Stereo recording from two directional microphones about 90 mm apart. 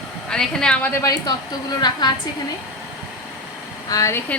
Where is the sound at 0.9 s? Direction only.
40° left (ahead or behind).